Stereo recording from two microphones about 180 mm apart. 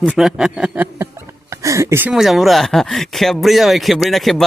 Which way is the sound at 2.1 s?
Centre (ahead or behind).